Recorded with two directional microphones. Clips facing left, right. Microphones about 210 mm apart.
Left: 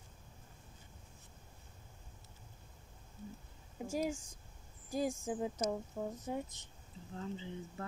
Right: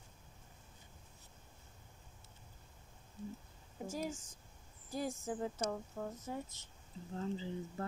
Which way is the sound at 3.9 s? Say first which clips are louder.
Left 6 dB; 15° left (ahead or behind).